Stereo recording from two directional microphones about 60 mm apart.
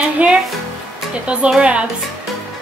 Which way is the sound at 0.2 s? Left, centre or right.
Right.